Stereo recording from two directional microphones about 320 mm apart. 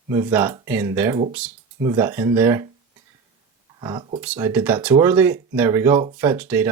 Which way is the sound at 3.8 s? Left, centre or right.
Centre.